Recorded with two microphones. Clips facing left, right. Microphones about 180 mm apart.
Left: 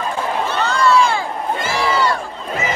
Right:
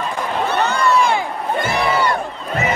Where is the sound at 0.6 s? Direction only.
20° right (ahead or behind).